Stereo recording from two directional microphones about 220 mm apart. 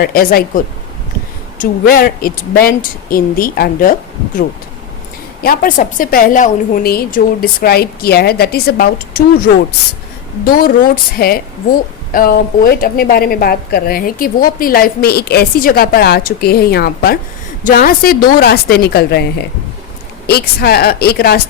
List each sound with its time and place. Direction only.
0.0 s speech: 40° left (ahead or behind)
5.4 s a woman's voice: 40° left (ahead or behind)
10.4 s a woman's voice: 40° left (ahead or behind)
20.2 s a woman's voice: 45° left (ahead or behind)